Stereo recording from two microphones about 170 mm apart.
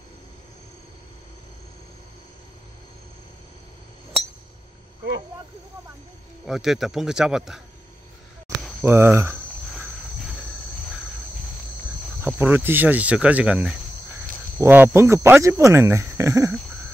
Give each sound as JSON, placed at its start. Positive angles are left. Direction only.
{"t": 6.4, "sound": "speech", "side_deg": 0}
{"t": 8.8, "sound": "speech", "side_deg": -15}
{"t": 12.2, "sound": "speech", "side_deg": -10}